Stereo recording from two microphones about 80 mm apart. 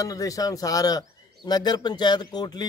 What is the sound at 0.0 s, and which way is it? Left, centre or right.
Speech, left.